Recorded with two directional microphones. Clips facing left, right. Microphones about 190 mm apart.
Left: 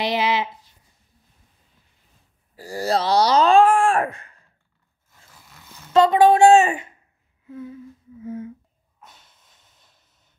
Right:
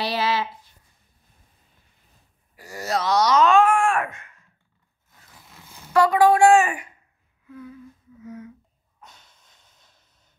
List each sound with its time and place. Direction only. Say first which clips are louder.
0.0 s a woman's voice: left 2 dB; 20° left (ahead or behind)
2.5 s speech: left 4 dB; 30° left (ahead or behind)
5.9 s a woman's voice: left 2 dB; 25° left (ahead or behind)
7.4 s humming: left 4 dB; 25° left (ahead or behind)
9.0 s snort: even; centre (ahead or behind)